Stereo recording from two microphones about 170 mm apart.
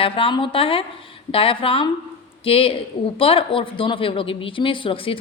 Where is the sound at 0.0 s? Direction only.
30° left (ahead or behind).